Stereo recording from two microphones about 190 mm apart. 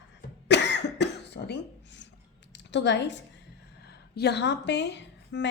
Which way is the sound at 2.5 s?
65° left (ahead or behind).